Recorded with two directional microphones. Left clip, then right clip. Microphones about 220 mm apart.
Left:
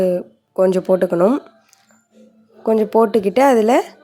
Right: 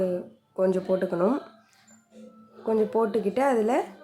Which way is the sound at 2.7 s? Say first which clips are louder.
Left 10 dB; 35° left (ahead or behind).